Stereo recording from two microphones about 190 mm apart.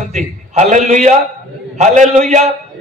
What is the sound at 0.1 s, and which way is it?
A man's voice, 40° right (ahead or behind).